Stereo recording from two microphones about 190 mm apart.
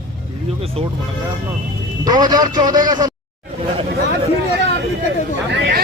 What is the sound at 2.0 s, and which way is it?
A man's voice, 20° right (ahead or behind).